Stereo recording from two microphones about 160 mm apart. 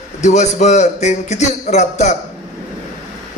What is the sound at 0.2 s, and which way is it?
A man's voice, 45° left (ahead or behind).